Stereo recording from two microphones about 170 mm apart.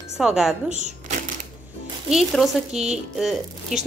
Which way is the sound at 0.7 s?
45° right (ahead or behind).